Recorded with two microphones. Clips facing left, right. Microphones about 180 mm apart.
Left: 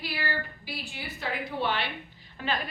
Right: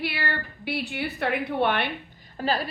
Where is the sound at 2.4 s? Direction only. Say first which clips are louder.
Right 5 dB; 35° right (ahead or behind).